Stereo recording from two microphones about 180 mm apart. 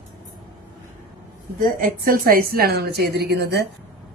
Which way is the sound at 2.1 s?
55° right (ahead or behind).